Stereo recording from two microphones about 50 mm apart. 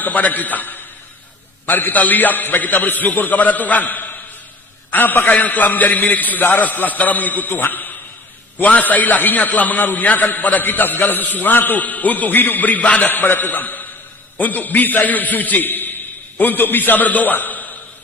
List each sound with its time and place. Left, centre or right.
0.0 s a man's voice: left